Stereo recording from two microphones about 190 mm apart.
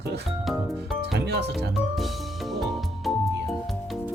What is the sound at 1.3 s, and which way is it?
Music, 60° right (ahead or behind).